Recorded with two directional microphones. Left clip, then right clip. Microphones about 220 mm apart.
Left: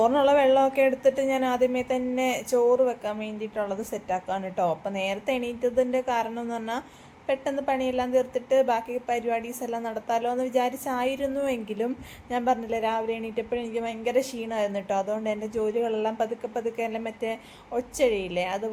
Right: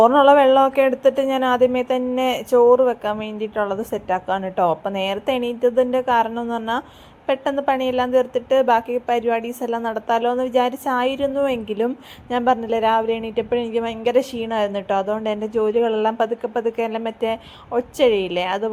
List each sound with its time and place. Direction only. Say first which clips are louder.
0.0 s a woman's voice: right 8 dB; 15° right (ahead or behind)